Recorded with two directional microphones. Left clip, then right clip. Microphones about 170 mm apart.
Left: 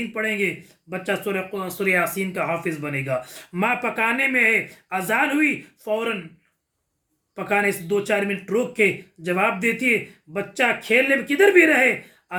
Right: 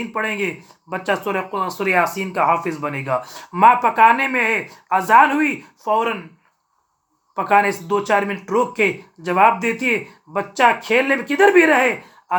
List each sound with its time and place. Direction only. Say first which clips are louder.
0.1 s speech: right 2 dB; 20° left (ahead or behind)
7.3 s speech: right 6 dB; 20° left (ahead or behind)